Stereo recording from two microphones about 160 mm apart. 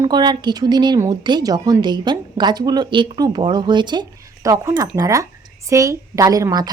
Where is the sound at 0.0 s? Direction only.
25° right (ahead or behind).